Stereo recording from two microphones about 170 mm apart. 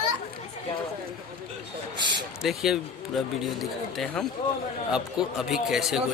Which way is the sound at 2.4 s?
Centre (ahead or behind).